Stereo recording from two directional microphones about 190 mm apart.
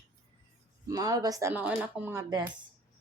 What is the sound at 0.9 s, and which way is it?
Speech, 20° right (ahead or behind).